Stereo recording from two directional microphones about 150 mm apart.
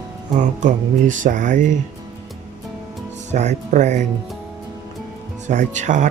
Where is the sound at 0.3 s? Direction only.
55° right (ahead or behind).